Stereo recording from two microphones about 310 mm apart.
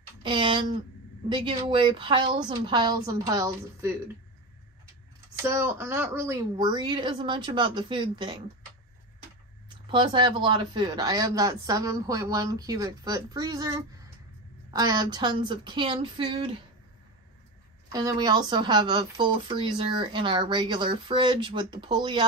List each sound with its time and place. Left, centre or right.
0.2 s speech: centre
5.4 s speech: centre
9.8 s speech: centre
17.9 s speech: centre